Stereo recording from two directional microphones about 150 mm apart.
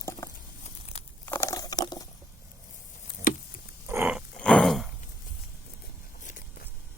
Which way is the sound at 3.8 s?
15° right (ahead or behind).